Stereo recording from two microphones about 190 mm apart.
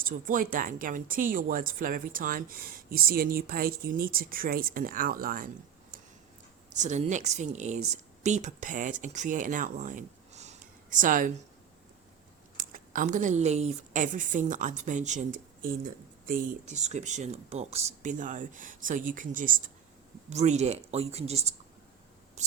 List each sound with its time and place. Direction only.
0.0 s speech: 45° right (ahead or behind)
6.7 s speech: 40° right (ahead or behind)
12.5 s a woman's voice: 45° right (ahead or behind)